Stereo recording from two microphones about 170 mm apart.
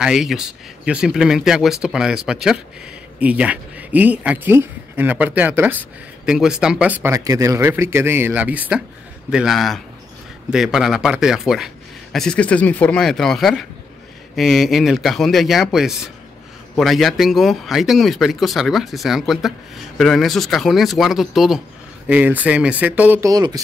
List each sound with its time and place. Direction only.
0.0 s speech: 5° right (ahead or behind)
23.3 s speech: 25° right (ahead or behind)